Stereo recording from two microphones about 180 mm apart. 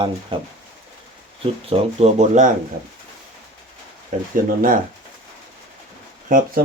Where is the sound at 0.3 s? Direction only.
30° right (ahead or behind).